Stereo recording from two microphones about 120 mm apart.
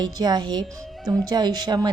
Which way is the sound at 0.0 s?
35° right (ahead or behind).